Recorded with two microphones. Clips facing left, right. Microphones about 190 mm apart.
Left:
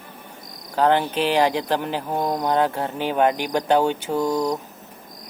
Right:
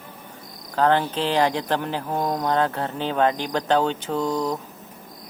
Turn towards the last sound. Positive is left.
turn(degrees=10)  # may be behind; listen again after turning